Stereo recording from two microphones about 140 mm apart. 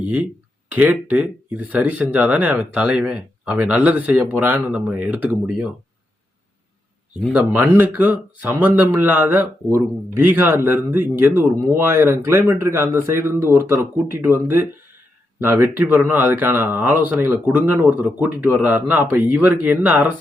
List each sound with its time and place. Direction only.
0.0 s speech: 10° right (ahead or behind)
7.3 s speech: 15° right (ahead or behind)